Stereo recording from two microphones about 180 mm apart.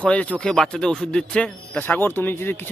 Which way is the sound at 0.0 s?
5° left (ahead or behind).